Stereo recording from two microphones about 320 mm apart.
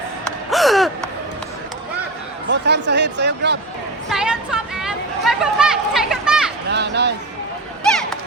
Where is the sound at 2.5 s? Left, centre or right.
Right.